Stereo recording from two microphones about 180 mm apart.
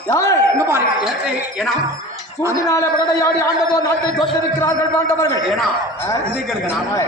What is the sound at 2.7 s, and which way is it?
Speech, 15° left (ahead or behind).